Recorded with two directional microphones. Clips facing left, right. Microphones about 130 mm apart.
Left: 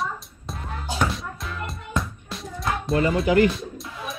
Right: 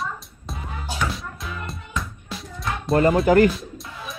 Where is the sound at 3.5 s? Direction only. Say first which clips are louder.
Even; centre (ahead or behind).